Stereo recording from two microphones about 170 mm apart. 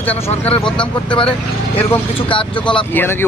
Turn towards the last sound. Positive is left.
turn(degrees=10)  # may be behind; listen again after turning